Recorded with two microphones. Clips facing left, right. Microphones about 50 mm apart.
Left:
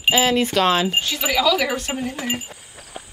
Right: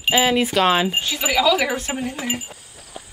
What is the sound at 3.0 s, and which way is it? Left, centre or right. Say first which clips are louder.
Insect: left 1 dB; left.